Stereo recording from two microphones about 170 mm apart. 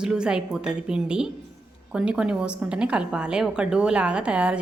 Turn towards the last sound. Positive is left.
turn(degrees=-5)  # may be behind; listen again after turning